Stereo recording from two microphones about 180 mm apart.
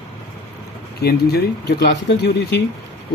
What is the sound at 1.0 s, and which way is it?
Speech, 60° left (ahead or behind).